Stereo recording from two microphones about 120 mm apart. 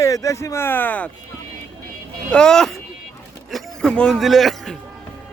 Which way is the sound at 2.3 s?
5° left (ahead or behind).